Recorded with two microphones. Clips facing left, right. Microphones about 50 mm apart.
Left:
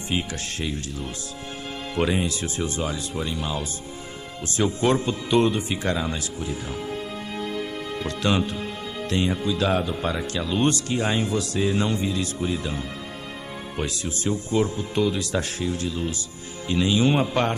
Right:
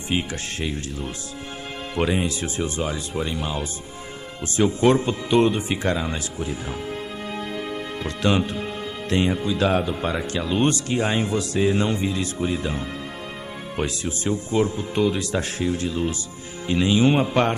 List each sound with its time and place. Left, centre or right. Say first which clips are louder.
0.1 s speech: right 2 dB; right
2.0 s speech: right 1 dB; centre
8.0 s speech: right 2 dB; centre